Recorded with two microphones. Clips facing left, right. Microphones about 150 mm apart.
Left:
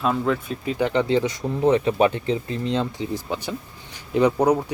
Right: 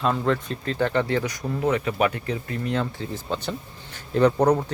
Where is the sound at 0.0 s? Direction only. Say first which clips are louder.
Left 1 dB; 5° left (ahead or behind).